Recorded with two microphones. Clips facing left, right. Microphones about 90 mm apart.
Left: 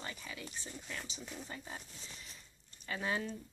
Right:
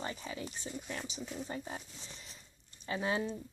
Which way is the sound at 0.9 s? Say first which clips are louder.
Right 5 dB; 25° right (ahead or behind).